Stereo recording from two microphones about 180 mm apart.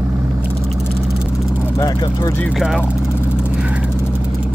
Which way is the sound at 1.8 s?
20° left (ahead or behind).